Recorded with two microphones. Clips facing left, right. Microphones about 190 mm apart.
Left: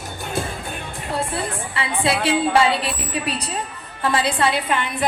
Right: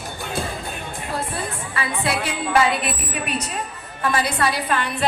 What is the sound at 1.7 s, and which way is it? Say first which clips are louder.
A woman's voice: left 2 dB; 30° left (ahead or behind).